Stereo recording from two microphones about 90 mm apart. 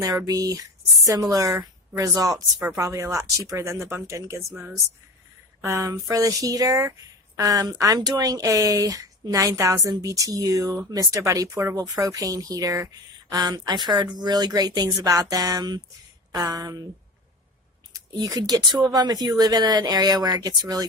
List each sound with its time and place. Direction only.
0.3 s speech: 40° right (ahead or behind)
5.6 s speech: 35° right (ahead or behind)
17.9 s speech: 45° right (ahead or behind)